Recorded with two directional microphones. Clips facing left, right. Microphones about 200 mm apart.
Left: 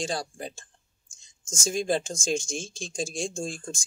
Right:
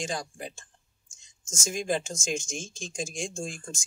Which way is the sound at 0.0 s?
35° left (ahead or behind).